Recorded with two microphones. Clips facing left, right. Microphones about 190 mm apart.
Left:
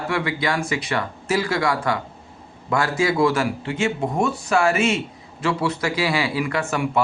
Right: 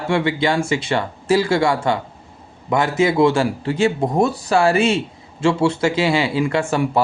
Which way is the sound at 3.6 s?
35° right (ahead or behind).